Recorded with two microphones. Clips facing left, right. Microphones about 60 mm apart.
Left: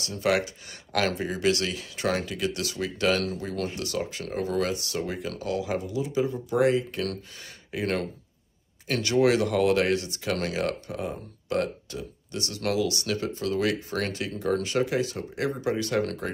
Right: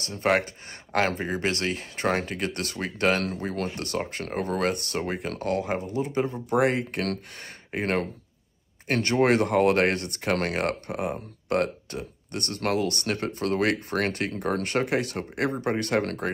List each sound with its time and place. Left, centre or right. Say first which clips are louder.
0.0 s speech: right 1 dB; right
7.7 s speech: right 2 dB; right